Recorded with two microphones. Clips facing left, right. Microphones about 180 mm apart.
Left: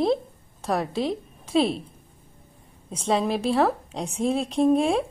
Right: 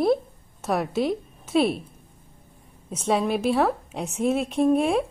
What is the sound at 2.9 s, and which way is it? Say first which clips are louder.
A woman's voice: right 1 dB; 5° right (ahead or behind).